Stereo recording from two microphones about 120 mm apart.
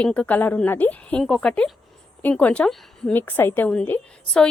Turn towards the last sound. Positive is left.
turn(degrees=10)  # may be behind; listen again after turning